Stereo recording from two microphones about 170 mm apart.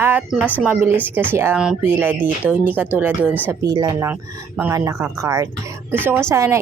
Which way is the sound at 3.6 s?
25° right (ahead or behind).